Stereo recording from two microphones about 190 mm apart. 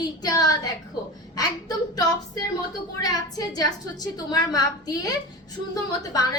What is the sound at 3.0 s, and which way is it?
A woman's voice, 20° left (ahead or behind).